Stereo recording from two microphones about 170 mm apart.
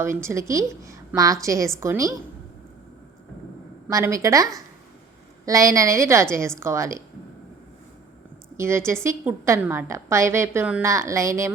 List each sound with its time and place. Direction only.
0.0 s a woman's voice: 15° right (ahead or behind)
3.8 s a woman's voice: 20° right (ahead or behind)
8.5 s a woman's voice: 15° right (ahead or behind)